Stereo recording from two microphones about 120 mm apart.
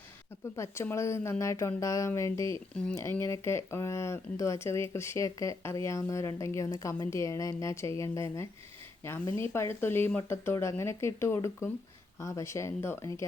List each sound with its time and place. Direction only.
0.5 s speech: 20° left (ahead or behind)